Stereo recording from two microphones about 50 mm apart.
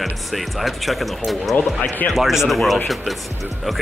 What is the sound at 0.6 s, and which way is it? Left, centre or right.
Speech, centre.